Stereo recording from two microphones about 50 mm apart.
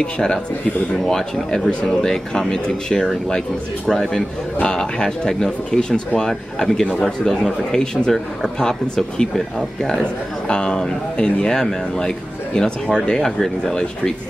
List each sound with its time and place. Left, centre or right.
0.0 s speech: centre
10.5 s speech: centre